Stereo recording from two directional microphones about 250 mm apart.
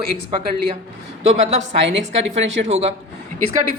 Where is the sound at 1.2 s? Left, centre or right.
Right.